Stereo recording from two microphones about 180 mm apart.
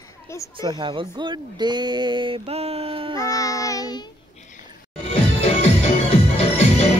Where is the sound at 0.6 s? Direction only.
25° right (ahead or behind).